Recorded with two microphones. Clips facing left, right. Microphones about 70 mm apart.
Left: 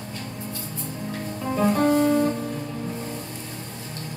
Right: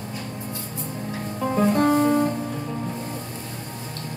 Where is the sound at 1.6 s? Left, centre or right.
Centre.